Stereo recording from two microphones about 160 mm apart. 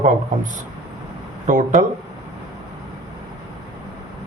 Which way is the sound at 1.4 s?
50° right (ahead or behind).